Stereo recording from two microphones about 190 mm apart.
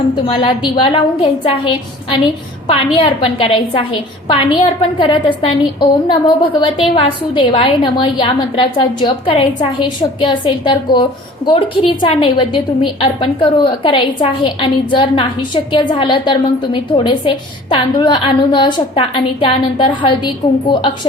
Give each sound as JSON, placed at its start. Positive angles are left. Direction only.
{"t": 0.3, "sound": "a woman's voice", "side_deg": 25}